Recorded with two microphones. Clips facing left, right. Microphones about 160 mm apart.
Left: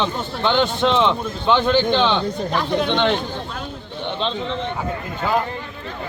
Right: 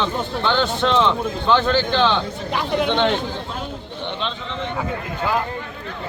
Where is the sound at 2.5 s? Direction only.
10° right (ahead or behind).